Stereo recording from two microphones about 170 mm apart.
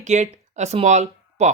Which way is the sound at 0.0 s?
45° right (ahead or behind).